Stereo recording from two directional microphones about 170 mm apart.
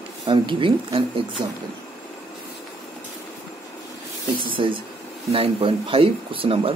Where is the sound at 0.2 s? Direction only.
30° right (ahead or behind).